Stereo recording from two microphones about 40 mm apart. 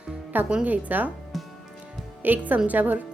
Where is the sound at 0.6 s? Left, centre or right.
Right.